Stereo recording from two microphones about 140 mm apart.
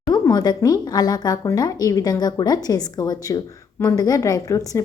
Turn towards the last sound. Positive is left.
turn(degrees=25)  # may be behind; listen again after turning